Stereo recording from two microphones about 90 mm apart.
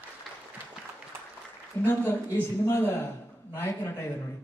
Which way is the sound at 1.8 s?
25° left (ahead or behind).